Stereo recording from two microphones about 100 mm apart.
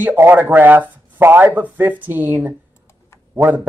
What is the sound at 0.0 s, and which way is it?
Speech, 20° right (ahead or behind).